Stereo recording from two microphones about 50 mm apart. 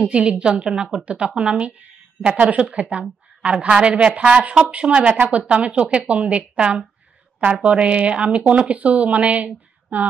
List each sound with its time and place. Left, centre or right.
0.0 s speech: right